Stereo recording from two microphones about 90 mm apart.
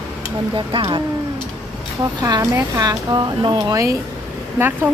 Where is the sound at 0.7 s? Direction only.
65° right (ahead or behind).